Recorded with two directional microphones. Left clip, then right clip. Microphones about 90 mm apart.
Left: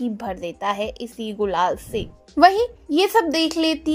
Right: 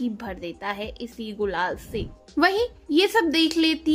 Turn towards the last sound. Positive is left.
turn(degrees=30)  # may be behind; listen again after turning